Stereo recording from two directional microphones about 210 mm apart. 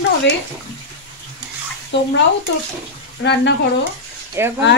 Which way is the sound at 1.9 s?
55° left (ahead or behind).